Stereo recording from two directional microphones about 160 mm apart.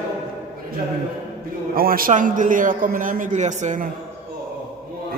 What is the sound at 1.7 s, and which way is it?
A man's voice, 65° right (ahead or behind).